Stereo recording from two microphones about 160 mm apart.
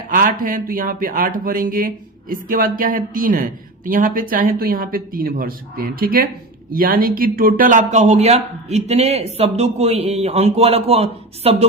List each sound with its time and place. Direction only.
0.1 s speech: 60° right (ahead or behind); by 11.5 s 40° right (ahead or behind)